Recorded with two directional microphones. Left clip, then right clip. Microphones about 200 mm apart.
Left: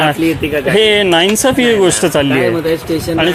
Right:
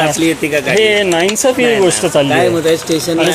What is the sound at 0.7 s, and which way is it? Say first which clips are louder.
Speech: left 3 dB; 45° left (ahead or behind).